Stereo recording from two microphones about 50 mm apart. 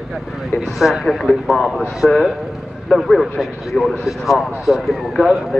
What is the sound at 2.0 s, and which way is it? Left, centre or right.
Speech, centre.